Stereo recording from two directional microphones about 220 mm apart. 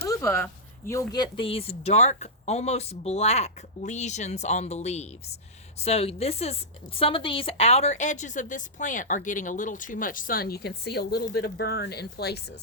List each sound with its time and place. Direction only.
0.0 s a woman's voice: 15° left (ahead or behind); by 12.4 s 45° left (ahead or behind)